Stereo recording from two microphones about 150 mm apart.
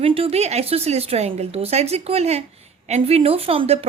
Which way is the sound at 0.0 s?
40° right (ahead or behind).